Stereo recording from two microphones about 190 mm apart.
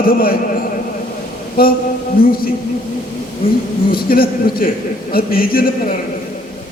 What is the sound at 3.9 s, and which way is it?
A man's voice, 50° left (ahead or behind).